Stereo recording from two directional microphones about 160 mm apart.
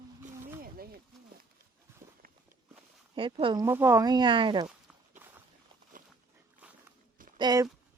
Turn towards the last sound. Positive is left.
turn(degrees=-25)  # may be behind; listen again after turning